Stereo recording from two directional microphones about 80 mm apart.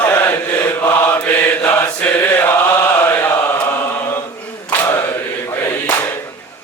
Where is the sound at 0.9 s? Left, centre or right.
Left.